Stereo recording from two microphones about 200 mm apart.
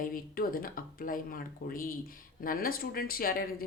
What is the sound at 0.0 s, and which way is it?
Speech, 45° left (ahead or behind).